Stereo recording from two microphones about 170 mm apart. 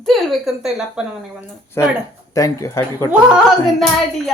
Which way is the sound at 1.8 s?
15° left (ahead or behind).